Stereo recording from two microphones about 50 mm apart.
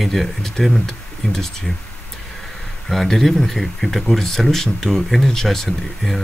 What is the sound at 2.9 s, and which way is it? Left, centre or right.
Speech, centre.